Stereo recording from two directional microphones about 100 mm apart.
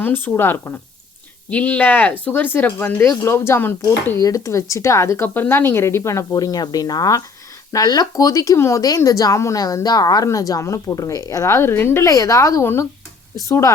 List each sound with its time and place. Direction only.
0.0 s speech: 20° left (ahead or behind)
4.2 s a woman's voice: 35° left (ahead or behind)